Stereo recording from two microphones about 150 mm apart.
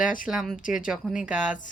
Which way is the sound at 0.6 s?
60° left (ahead or behind).